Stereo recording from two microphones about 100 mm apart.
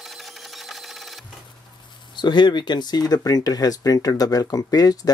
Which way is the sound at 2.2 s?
50° left (ahead or behind).